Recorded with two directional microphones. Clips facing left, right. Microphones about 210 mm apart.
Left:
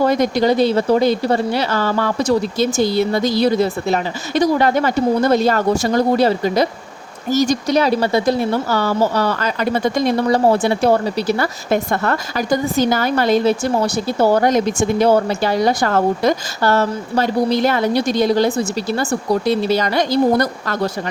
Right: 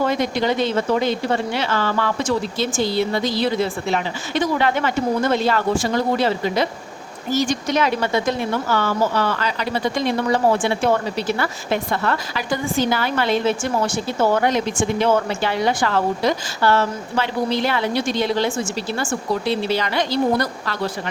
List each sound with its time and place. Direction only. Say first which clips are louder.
0.0 s speech: left 5 dB; 40° left (ahead or behind)